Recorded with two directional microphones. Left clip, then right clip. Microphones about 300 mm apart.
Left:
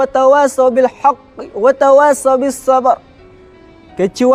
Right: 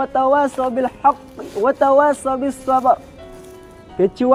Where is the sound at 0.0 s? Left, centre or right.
Left.